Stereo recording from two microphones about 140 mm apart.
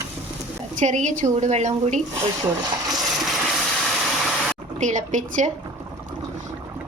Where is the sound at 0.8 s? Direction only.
60° right (ahead or behind).